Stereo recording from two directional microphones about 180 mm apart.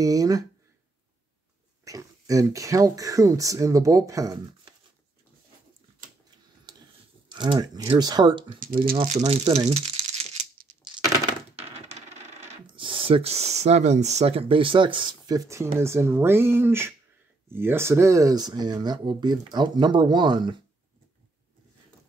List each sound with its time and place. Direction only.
0.0 s speech: 20° right (ahead or behind)
1.9 s speech: 20° right (ahead or behind)
6.7 s a sound: 20° right (ahead or behind)
7.2 s speech: 25° right (ahead or behind)
9.0 s speech: 40° right (ahead or behind)
10.8 s crack: 25° right (ahead or behind)
12.7 s speech: 30° right (ahead or behind)